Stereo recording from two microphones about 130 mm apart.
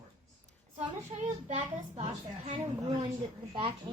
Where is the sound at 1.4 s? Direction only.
65° right (ahead or behind).